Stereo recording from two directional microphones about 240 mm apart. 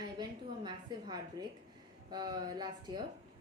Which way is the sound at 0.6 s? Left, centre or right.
Centre.